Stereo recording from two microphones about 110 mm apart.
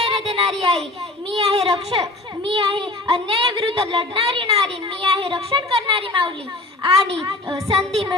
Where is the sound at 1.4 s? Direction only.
65° right (ahead or behind).